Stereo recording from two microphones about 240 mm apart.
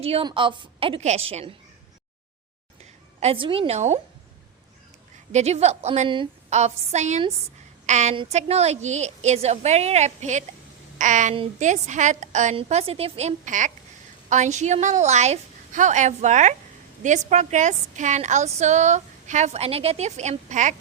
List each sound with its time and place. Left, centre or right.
0.0 s a woman's voice: right
3.2 s a woman's voice: right
5.3 s a woman's voice: right